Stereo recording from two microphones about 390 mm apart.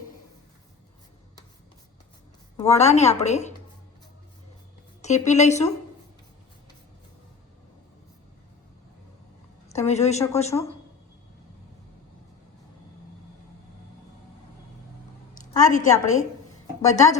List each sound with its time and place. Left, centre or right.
2.6 s a woman's voice: centre
5.0 s a woman's voice: centre
9.6 s a woman's voice: centre
15.4 s a woman's voice: centre